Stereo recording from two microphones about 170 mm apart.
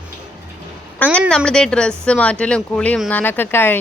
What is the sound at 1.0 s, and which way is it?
A woman's voice, 5° left (ahead or behind).